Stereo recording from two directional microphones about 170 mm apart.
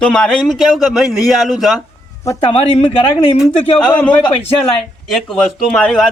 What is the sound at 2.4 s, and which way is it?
Speech, 35° left (ahead or behind).